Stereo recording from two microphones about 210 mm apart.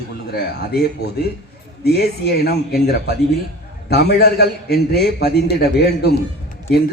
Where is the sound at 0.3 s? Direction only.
50° left (ahead or behind).